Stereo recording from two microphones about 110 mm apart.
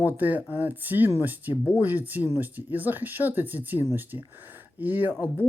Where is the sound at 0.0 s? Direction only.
15° right (ahead or behind).